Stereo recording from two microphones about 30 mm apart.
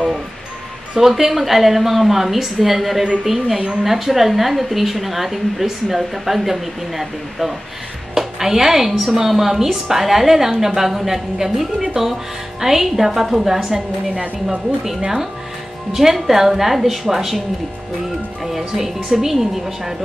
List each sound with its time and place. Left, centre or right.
0.9 s a woman's voice: centre
3.0 s a woman's voice: centre
15.9 s a woman's voice: centre
18.4 s a woman's voice: centre